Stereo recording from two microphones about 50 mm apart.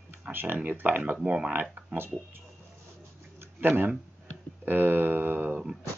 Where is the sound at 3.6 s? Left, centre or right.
Right.